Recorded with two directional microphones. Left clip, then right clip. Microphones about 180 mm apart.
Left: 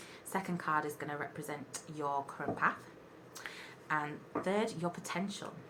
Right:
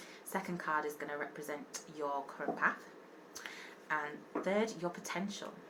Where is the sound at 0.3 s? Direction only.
15° left (ahead or behind).